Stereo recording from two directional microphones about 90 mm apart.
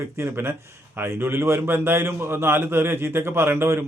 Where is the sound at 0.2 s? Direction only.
30° right (ahead or behind).